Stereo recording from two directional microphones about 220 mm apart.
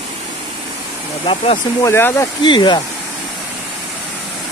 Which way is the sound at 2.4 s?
20° left (ahead or behind).